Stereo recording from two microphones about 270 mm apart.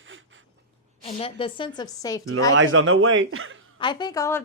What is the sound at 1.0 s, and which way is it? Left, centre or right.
A woman's voice, left.